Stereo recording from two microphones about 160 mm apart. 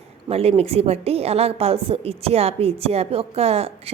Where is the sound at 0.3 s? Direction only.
40° right (ahead or behind).